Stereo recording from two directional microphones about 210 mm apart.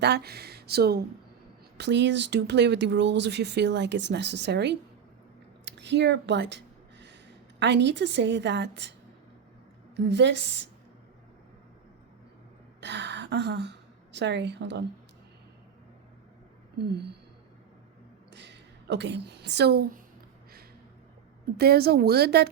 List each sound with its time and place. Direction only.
0.0 s speech: 50° right (ahead or behind)
7.6 s speech: 55° right (ahead or behind)
12.8 s a woman's voice: 55° right (ahead or behind)
16.7 s speech: 50° right (ahead or behind)
18.3 s a sound: 55° right (ahead or behind)
21.6 s speech: 50° right (ahead or behind)